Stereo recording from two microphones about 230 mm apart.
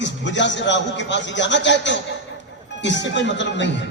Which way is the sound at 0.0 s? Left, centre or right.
Left.